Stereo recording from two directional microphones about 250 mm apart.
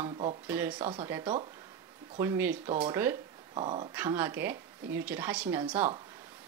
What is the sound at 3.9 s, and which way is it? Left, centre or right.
A woman's voice, centre.